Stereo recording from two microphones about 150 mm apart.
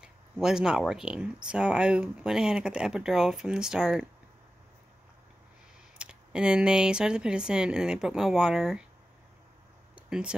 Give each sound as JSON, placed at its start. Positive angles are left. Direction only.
{"t": 0.0, "sound": "speech", "side_deg": -5}
{"t": 5.9, "sound": "speech", "side_deg": -5}
{"t": 9.9, "sound": "a sound", "side_deg": -5}